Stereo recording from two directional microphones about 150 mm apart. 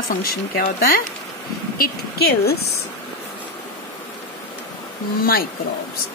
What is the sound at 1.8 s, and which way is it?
Speech, 90° left.